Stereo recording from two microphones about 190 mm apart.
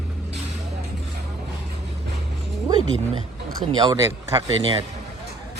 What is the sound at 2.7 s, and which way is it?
Speech, 30° right (ahead or behind).